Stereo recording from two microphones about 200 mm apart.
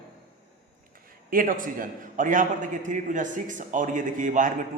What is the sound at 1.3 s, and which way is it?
A man's voice, 45° right (ahead or behind).